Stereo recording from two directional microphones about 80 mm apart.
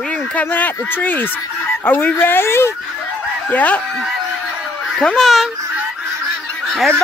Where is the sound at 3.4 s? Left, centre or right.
Centre.